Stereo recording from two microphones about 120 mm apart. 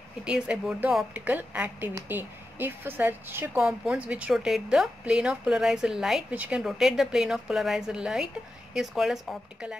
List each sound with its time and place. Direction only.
0.2 s a woman's voice: 10° right (ahead or behind)